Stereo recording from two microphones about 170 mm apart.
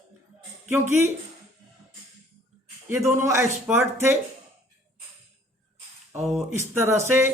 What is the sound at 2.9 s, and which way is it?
Speech, 15° right (ahead or behind).